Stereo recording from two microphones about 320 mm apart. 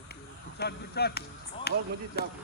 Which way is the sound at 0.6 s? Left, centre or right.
Left.